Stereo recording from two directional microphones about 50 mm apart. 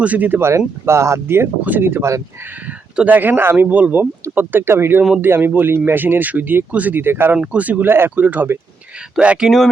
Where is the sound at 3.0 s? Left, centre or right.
Right.